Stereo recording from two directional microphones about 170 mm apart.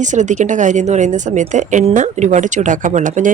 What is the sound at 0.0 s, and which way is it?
A woman's voice, 45° right (ahead or behind).